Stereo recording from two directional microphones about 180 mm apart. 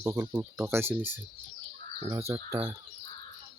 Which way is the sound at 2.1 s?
15° right (ahead or behind).